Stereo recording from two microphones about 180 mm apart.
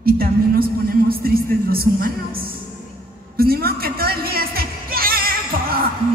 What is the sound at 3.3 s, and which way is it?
Music, 60° right (ahead or behind).